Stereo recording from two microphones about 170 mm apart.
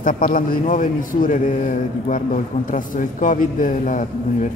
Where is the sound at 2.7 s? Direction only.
50° left (ahead or behind).